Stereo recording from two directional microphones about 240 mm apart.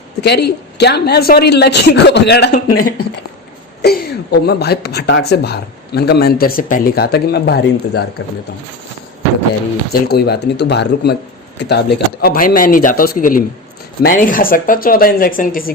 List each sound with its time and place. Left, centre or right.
0.2 s a woman's voice: left
3.8 s a woman's voice: left
9.9 s a woman's voice: left